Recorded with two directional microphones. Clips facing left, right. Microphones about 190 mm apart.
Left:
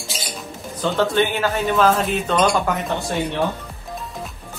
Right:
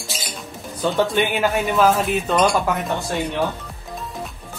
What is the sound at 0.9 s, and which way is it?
Speech, 15° right (ahead or behind).